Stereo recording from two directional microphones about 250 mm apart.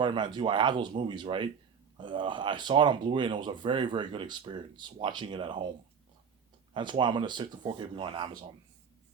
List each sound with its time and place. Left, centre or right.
0.0 s speech: centre
6.7 s speech: centre